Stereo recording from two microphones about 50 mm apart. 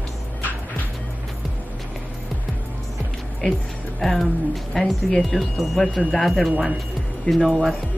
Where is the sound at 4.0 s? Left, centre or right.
Centre.